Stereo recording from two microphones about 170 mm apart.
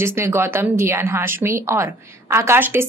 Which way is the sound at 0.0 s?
15° right (ahead or behind).